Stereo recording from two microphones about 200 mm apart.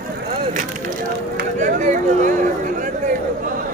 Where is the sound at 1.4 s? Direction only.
40° right (ahead or behind).